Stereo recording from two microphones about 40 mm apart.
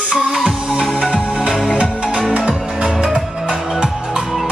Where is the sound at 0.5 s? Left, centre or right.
Centre.